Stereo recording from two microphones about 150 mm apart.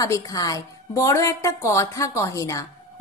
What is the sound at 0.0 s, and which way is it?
A woman's voice, 25° left (ahead or behind).